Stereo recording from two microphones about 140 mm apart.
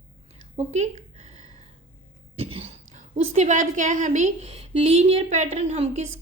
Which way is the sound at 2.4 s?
45° right (ahead or behind).